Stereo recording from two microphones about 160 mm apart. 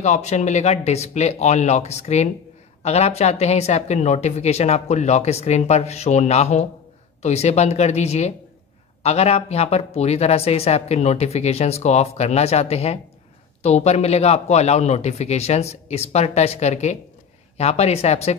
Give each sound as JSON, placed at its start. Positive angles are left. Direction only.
{"t": 0.0, "sound": "speech", "side_deg": 45}